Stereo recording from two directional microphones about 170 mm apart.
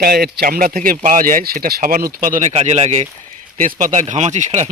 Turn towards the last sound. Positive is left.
turn(degrees=-45)  # may be behind; listen again after turning